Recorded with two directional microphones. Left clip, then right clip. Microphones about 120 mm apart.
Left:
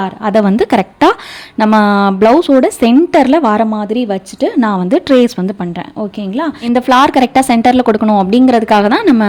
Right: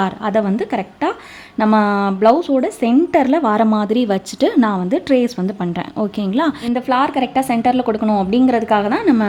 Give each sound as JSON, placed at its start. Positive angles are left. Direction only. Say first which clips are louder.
{"t": 0.2, "sound": "a woman's voice", "louder": "left 9 dB", "side_deg": 25}
{"t": 0.4, "sound": "a woman's voice", "louder": "left 9 dB", "side_deg": 55}
{"t": 1.5, "sound": "speech", "louder": "left 5 dB", "side_deg": 35}
{"t": 3.1, "sound": "a woman's voice", "louder": "left 5 dB", "side_deg": 30}
{"t": 3.7, "sound": "speech", "louder": "left 1 dB", "side_deg": 10}
{"t": 4.6, "sound": "a woman's voice", "louder": "left 5 dB", "side_deg": 30}
{"t": 6.0, "sound": "speech", "louder": "left 1 dB", "side_deg": 10}
{"t": 6.7, "sound": "a woman's voice", "louder": "left 9 dB", "side_deg": 50}